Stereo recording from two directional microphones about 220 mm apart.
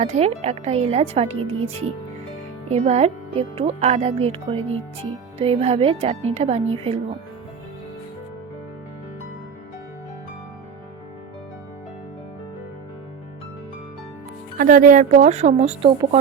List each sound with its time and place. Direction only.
0.0 s speech: 30° right (ahead or behind)
14.6 s speech: 40° right (ahead or behind)